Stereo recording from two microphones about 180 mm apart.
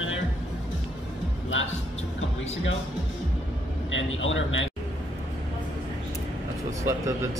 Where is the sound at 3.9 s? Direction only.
90° left.